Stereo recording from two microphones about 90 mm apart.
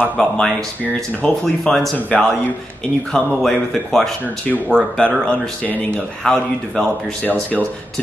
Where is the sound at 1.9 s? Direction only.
20° left (ahead or behind).